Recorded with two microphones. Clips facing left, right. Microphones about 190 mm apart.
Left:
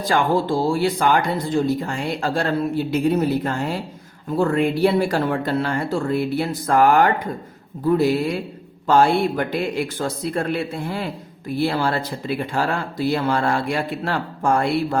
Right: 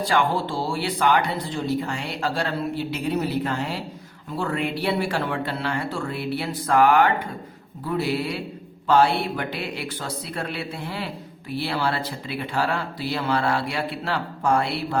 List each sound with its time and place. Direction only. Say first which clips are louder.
0.0 s speech: left 3 dB; 45° left (ahead or behind)